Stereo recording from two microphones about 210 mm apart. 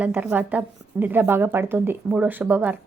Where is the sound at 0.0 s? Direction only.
5° right (ahead or behind).